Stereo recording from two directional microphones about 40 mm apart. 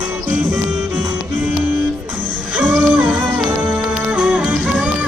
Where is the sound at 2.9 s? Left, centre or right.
Right.